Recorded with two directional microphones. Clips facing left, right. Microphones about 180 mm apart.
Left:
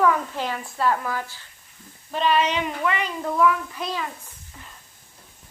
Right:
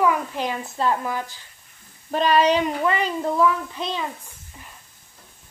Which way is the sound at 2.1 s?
40° right (ahead or behind).